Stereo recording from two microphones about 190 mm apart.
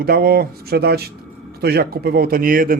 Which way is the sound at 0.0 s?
50° right (ahead or behind).